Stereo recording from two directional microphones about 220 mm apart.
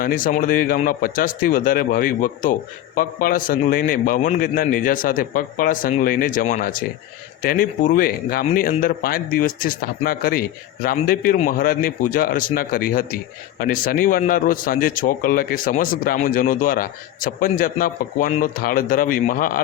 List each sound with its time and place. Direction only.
0.0 s speech: 40° left (ahead or behind)